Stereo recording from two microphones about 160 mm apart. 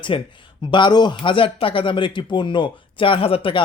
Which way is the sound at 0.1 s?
35° left (ahead or behind).